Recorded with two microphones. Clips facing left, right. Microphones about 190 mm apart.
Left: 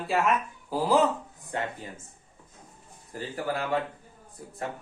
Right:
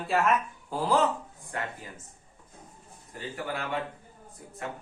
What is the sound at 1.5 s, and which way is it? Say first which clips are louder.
Speech: left 3 dB; 25° left (ahead or behind).